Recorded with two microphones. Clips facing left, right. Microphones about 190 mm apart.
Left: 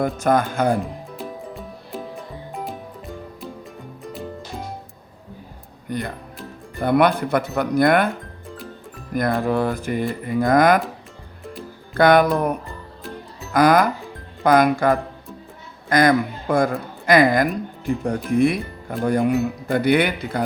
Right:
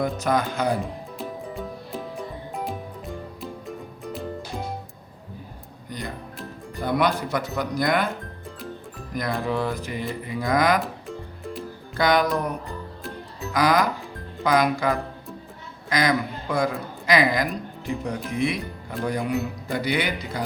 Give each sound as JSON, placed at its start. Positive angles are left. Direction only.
{"t": 0.0, "sound": "speech", "side_deg": 50}
{"t": 1.2, "sound": "music", "side_deg": 0}
{"t": 5.9, "sound": "music", "side_deg": 60}
{"t": 6.7, "sound": "speech", "side_deg": 60}
{"t": 8.1, "sound": "music", "side_deg": 0}
{"t": 9.1, "sound": "speech", "side_deg": 50}
{"t": 11.9, "sound": "speech", "side_deg": 55}